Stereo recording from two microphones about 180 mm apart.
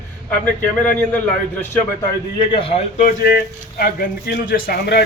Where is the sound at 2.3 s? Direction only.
30° left (ahead or behind).